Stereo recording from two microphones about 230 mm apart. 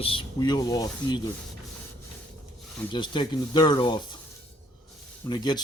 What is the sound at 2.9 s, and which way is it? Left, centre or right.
Speech, centre.